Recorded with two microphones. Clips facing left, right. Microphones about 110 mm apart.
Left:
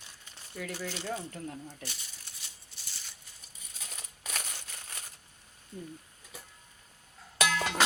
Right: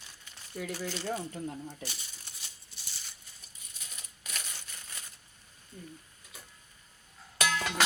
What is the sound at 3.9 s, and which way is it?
Crumpling, 80° left.